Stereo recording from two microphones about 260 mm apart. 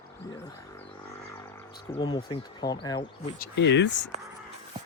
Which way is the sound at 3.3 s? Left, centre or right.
Left.